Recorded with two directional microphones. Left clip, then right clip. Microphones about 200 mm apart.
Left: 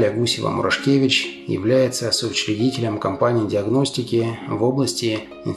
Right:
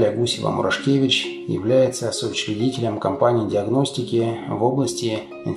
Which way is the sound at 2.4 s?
70° left (ahead or behind).